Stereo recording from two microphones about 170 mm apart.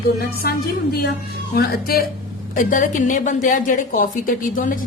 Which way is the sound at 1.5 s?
65° left (ahead or behind).